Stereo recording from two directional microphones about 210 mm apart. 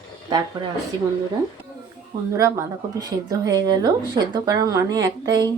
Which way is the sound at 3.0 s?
15° right (ahead or behind).